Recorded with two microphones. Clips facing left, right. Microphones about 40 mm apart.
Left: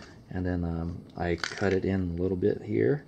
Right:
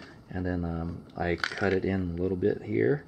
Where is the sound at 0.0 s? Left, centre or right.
Centre.